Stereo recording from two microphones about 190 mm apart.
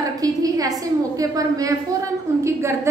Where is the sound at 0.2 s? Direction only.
20° right (ahead or behind).